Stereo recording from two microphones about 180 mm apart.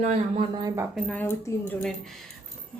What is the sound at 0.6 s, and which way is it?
Speech, 20° right (ahead or behind).